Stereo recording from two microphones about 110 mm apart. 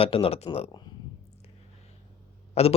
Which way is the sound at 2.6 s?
75° left (ahead or behind).